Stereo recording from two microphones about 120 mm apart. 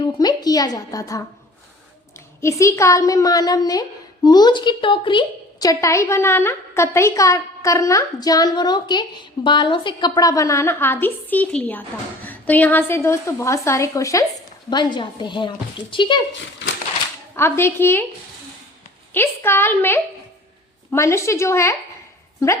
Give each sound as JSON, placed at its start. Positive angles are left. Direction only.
{"t": 0.0, "sound": "a woman's voice", "side_deg": 35}
{"t": 2.4, "sound": "a woman's voice", "side_deg": 25}
{"t": 5.5, "sound": "a woman's voice", "side_deg": 30}
{"t": 14.7, "sound": "a woman's voice", "side_deg": 40}
{"t": 17.3, "sound": "a woman's voice", "side_deg": 20}
{"t": 19.1, "sound": "a woman's voice", "side_deg": 20}